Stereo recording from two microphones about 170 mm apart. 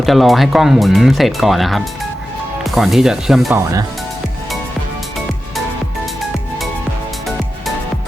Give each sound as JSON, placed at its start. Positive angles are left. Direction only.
{"t": 0.0, "sound": "speech", "side_deg": 0}
{"t": 3.5, "sound": "speech", "side_deg": -20}